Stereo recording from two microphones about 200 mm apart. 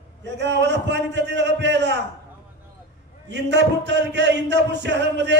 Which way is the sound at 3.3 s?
60° right (ahead or behind).